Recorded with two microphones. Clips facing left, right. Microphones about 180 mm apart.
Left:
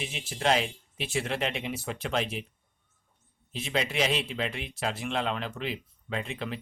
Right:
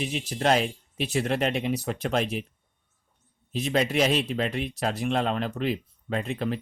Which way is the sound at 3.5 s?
40° right (ahead or behind).